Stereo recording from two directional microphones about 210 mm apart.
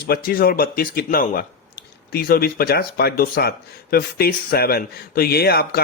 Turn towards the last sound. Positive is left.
turn(degrees=45)  # may be behind; listen again after turning